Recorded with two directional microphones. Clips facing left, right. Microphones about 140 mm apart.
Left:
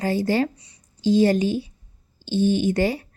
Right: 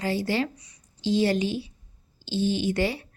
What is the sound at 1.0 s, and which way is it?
A woman's voice, 45° left (ahead or behind).